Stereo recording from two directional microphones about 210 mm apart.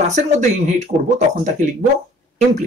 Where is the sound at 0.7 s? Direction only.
30° right (ahead or behind).